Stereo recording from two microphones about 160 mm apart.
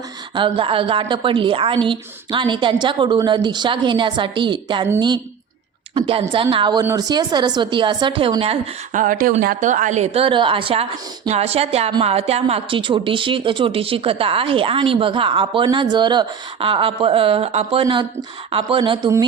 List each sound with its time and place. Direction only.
0.3 s a woman's voice: 30° right (ahead or behind)
5.9 s a woman's voice: 35° right (ahead or behind)
8.9 s a woman's voice: 55° right (ahead or behind); by 19.2 s 25° right (ahead or behind)